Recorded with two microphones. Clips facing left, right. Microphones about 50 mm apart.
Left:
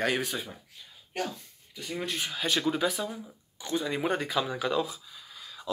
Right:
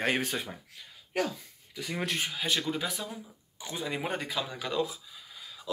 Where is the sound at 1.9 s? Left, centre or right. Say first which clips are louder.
Right 1 dB; right.